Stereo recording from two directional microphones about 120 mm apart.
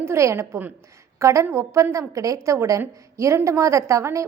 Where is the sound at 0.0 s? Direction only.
25° right (ahead or behind).